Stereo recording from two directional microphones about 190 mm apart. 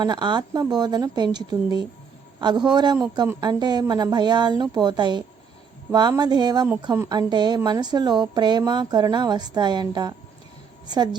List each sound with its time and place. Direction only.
0.0 s a woman's voice: 25° right (ahead or behind)